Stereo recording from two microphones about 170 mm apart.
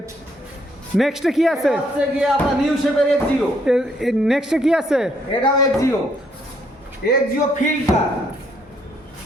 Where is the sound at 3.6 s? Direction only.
5° right (ahead or behind).